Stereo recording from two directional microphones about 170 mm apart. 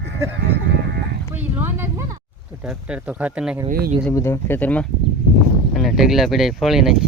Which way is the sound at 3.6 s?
60° right (ahead or behind).